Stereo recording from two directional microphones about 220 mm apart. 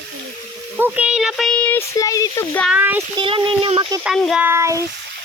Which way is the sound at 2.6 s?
5° right (ahead or behind).